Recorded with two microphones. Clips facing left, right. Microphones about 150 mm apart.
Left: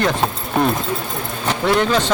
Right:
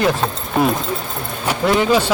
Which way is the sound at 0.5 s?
Centre (ahead or behind).